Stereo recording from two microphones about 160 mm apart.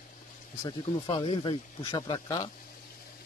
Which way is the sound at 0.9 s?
35° left (ahead or behind).